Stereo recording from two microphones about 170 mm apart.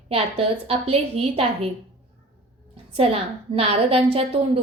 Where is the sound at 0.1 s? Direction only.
35° right (ahead or behind).